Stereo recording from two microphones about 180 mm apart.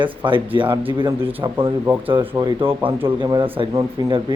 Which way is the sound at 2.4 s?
20° right (ahead or behind).